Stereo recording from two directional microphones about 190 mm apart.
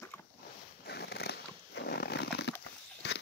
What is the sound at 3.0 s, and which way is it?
Biting, 60° left (ahead or behind).